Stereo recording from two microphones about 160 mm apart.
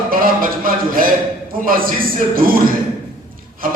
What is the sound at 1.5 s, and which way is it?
A man's voice, 65° right (ahead or behind).